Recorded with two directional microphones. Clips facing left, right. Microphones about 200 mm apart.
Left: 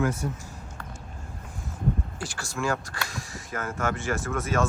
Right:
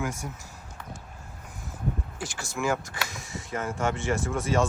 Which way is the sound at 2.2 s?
20° right (ahead or behind).